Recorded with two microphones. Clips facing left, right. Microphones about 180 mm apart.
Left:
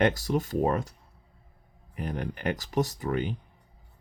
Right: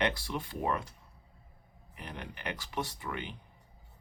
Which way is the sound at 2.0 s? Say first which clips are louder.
Left 10 dB; 45° left (ahead or behind).